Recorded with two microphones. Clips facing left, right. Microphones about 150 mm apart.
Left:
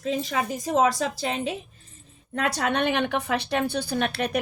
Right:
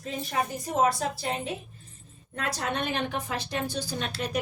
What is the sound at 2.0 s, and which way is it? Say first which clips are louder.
Speech: left 6 dB; 70° left (ahead or behind).